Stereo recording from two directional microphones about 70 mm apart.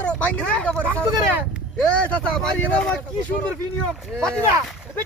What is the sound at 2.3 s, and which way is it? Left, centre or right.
Speech, centre.